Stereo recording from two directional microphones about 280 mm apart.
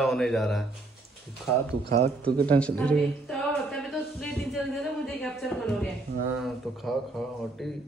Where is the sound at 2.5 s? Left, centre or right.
Centre.